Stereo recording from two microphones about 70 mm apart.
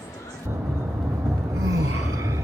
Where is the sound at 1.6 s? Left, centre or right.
Right.